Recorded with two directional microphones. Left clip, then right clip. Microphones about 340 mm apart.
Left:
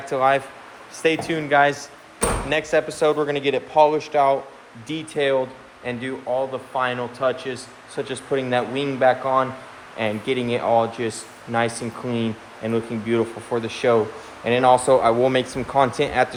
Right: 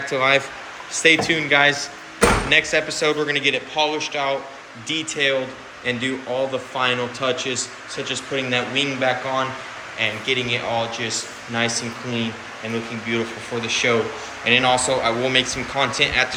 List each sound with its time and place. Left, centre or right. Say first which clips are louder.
0.1 s a man's voice: even; centre